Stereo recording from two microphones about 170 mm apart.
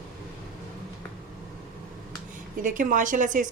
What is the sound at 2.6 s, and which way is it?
Speech, 50° right (ahead or behind).